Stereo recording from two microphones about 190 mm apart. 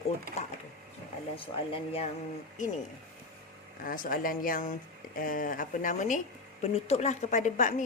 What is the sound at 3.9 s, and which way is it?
A woman's voice, 45° left (ahead or behind).